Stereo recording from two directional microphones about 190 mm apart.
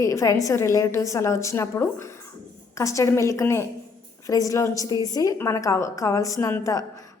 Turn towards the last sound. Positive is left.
turn(degrees=15)  # may be behind; listen again after turning